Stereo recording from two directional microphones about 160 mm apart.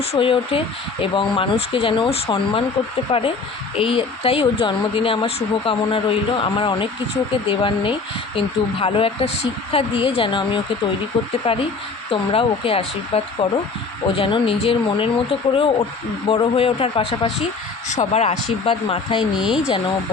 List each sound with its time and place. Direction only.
0.0 s speech: 35° left (ahead or behind)
19.4 s speech: 5° right (ahead or behind)